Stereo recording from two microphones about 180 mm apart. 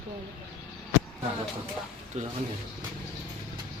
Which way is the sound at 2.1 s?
40° right (ahead or behind).